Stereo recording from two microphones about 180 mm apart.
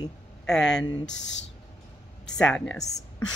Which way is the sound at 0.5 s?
5° left (ahead or behind).